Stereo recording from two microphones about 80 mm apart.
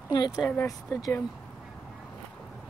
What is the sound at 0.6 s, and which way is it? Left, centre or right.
Speech, left.